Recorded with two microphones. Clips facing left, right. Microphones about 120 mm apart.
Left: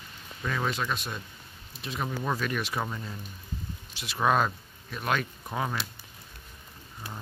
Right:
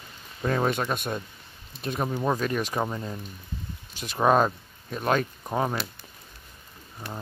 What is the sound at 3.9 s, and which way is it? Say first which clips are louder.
Speech: right 4 dB; 45° right (ahead or behind).